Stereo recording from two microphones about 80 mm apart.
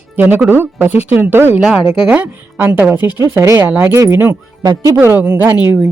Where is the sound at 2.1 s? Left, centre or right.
Right.